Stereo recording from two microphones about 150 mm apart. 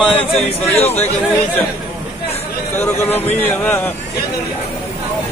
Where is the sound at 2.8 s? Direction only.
15° left (ahead or behind).